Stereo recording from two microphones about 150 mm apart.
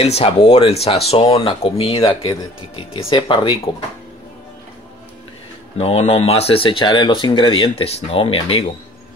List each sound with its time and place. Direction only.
0.0 s speech: 40° left (ahead or behind)
5.8 s speech: 45° left (ahead or behind)